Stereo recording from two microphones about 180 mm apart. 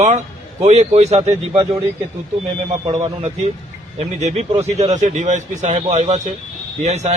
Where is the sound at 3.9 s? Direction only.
35° right (ahead or behind).